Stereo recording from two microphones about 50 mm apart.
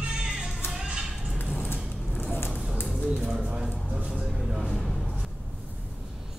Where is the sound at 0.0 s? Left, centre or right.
Centre.